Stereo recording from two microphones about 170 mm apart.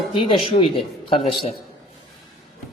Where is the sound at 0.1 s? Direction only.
30° left (ahead or behind).